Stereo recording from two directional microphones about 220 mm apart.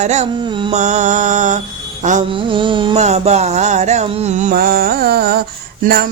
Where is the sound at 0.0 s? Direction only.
30° right (ahead or behind).